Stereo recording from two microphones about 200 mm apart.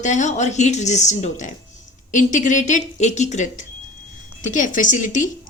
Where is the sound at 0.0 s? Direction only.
35° left (ahead or behind).